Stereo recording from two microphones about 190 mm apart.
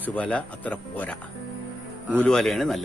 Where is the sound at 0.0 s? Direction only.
10° left (ahead or behind).